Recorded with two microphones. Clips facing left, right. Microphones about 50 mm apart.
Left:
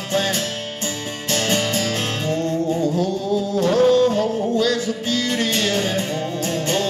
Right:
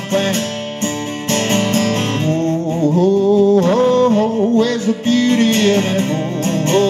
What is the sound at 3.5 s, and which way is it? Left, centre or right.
Music, right.